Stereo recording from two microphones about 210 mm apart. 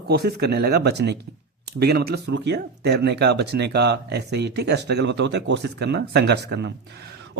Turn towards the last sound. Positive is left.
turn(degrees=-55)  # may be behind; listen again after turning